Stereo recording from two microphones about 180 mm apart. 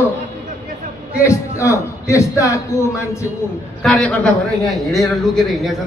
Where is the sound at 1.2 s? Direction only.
15° left (ahead or behind).